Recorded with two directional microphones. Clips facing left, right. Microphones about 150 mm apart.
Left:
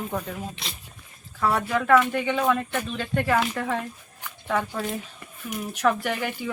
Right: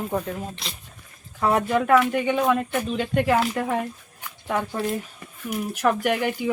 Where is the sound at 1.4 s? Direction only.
20° right (ahead or behind).